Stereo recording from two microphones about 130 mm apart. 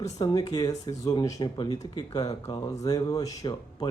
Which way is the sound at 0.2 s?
35° left (ahead or behind).